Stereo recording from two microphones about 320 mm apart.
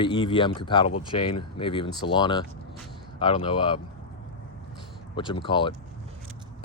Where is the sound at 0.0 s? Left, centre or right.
Centre.